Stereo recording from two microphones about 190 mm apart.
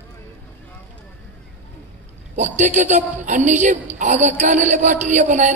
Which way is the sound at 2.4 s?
40° right (ahead or behind).